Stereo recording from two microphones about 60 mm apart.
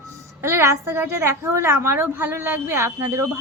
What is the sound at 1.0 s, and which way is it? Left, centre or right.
A woman's voice, right.